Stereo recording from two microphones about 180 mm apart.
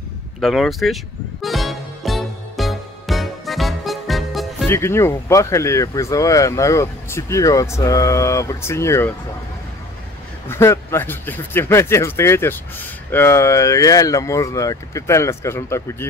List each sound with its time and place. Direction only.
0.4 s speech: centre (ahead or behind)
1.4 s music: centre (ahead or behind)
4.6 s speech: 15° left (ahead or behind)
10.5 s speech: 15° left (ahead or behind)